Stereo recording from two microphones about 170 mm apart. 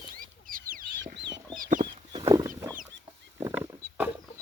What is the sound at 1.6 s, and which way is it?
Chicken, 50° right (ahead or behind).